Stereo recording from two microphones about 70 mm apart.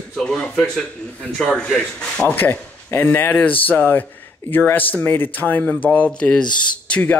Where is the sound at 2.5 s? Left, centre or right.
Left.